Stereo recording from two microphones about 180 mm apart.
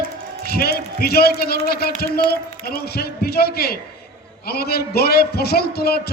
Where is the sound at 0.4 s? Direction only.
60° left (ahead or behind).